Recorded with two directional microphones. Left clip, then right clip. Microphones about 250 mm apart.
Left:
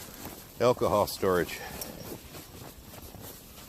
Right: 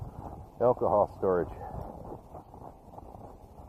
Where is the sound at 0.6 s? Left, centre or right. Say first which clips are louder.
Even; left.